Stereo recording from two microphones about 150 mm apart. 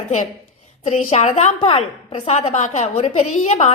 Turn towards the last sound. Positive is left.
turn(degrees=50)  # may be behind; listen again after turning